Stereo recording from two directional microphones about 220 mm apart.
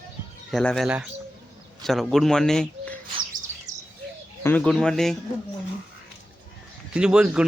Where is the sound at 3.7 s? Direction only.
35° right (ahead or behind).